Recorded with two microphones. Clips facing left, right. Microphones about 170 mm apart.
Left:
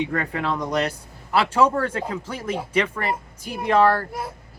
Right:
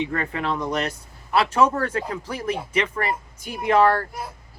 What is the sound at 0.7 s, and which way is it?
Speech, 35° left (ahead or behind).